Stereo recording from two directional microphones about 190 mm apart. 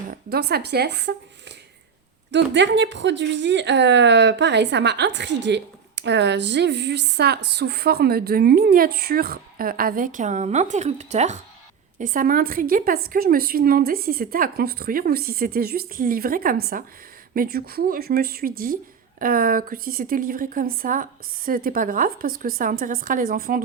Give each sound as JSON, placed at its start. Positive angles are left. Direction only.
{"t": 0.1, "sound": "a woman's voice", "side_deg": -60}